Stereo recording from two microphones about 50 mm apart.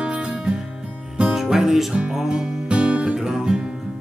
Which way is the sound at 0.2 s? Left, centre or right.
Centre.